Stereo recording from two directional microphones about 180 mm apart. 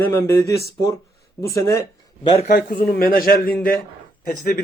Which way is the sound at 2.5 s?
60° left (ahead or behind).